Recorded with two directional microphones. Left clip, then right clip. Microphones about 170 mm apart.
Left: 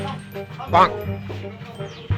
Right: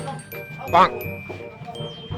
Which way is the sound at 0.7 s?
Centre (ahead or behind).